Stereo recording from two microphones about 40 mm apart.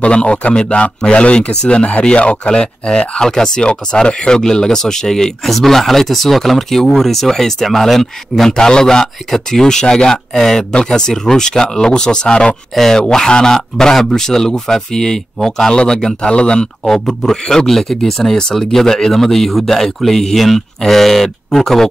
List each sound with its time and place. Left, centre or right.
0.0 s speech: left
2.4 s speech: left
8.5 s speech: centre
10.7 s speech: left
15.7 s speech: left
16.8 s speech: centre